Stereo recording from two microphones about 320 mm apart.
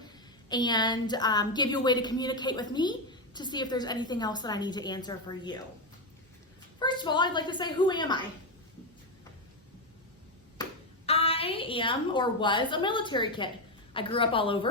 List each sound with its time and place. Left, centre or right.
0.0 s a woman's voice: centre
6.7 s a woman's voice: centre
10.6 s a woman's voice: centre